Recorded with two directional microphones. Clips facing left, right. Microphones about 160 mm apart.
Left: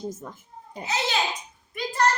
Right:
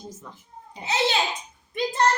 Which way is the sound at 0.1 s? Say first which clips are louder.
Left 5 dB; 50° left (ahead or behind).